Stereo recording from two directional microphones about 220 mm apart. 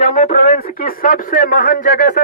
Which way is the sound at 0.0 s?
30° left (ahead or behind).